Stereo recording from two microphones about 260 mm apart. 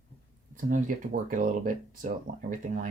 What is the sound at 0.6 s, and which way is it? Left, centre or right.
Speech, right.